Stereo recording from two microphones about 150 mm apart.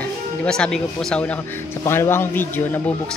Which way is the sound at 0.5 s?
5° left (ahead or behind).